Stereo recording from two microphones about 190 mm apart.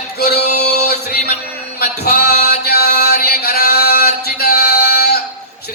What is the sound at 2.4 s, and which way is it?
Chant, 55° left (ahead or behind).